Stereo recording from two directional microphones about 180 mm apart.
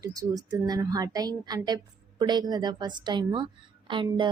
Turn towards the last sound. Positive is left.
turn(degrees=-25)  # may be behind; listen again after turning